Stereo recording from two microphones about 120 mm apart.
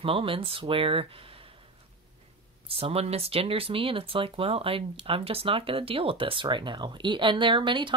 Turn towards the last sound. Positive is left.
turn(degrees=-40)  # may be behind; listen again after turning